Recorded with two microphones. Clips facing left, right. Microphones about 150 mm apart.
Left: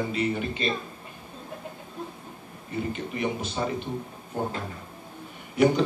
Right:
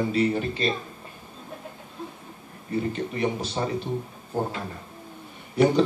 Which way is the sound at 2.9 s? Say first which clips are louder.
Right 3 dB; 35° right (ahead or behind).